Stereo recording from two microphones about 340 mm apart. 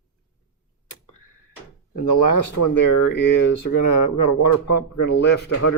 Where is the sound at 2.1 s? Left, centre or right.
Left.